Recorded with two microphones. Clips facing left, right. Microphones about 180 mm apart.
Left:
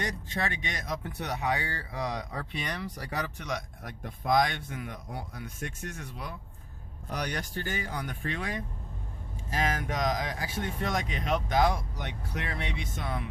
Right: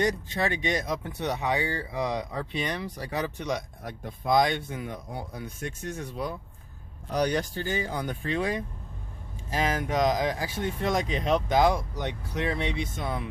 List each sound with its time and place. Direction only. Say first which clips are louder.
0.0 s speech: right 6 dB; 35° right (ahead or behind)